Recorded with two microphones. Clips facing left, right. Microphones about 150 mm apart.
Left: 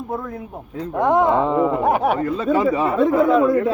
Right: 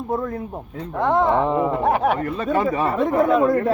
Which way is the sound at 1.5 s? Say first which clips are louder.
Left 2 dB; 15° right (ahead or behind).